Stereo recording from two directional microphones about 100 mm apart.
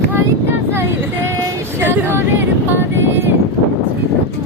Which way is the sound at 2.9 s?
25° right (ahead or behind).